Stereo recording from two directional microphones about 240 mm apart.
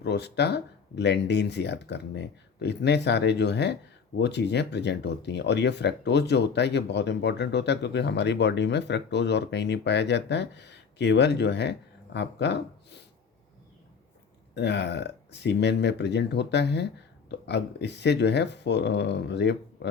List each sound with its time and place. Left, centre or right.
0.0 s speech: left
14.5 s speech: left